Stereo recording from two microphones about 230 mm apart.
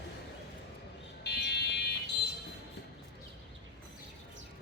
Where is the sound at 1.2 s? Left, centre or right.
Left.